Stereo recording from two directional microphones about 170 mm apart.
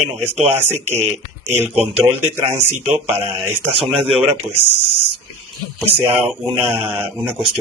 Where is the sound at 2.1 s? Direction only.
15° right (ahead or behind).